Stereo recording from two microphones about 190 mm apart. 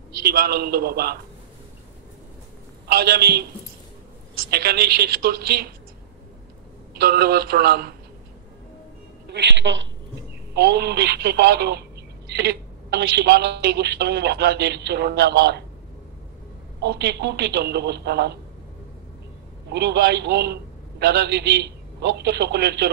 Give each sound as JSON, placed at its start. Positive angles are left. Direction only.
{"t": 0.2, "sound": "a woman's voice", "side_deg": -50}
{"t": 2.9, "sound": "a woman's voice", "side_deg": -55}
{"t": 4.5, "sound": "a woman's voice", "side_deg": -55}
{"t": 7.0, "sound": "a woman's voice", "side_deg": -55}
{"t": 9.3, "sound": "a woman's voice", "side_deg": -65}
{"t": 16.8, "sound": "a woman's voice", "side_deg": -60}
{"t": 19.7, "sound": "a woman's voice", "side_deg": -60}